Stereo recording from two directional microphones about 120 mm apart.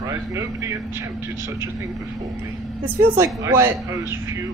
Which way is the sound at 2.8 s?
20° right (ahead or behind).